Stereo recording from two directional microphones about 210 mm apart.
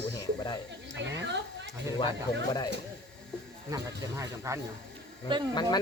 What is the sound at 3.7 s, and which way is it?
Speech, 15° right (ahead or behind).